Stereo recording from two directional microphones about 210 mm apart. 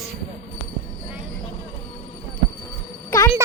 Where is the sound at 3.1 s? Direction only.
15° left (ahead or behind).